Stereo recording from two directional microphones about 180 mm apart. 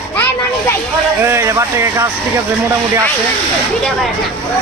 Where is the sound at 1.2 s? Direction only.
15° right (ahead or behind).